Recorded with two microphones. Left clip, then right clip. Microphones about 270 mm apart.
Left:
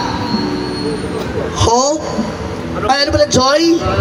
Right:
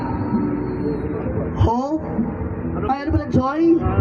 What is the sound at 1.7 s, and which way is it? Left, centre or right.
A man's voice, centre.